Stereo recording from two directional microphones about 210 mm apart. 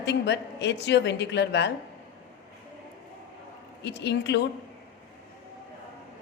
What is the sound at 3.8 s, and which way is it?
Speech, 55° left (ahead or behind).